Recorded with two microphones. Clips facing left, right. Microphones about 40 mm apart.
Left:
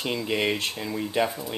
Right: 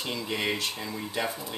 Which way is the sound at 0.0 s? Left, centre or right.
Centre.